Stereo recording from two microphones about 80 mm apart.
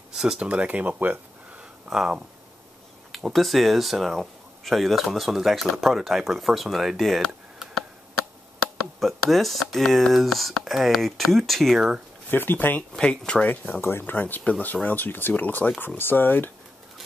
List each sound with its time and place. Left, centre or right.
0.1 s speech: centre
1.9 s speech: centre
9.0 s speech: centre
12.3 s speech: left
12.9 s speech: centre; by 16.4 s left